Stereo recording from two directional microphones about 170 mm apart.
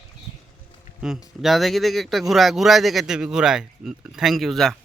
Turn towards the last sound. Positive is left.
turn(degrees=0)  # may be behind; listen again after turning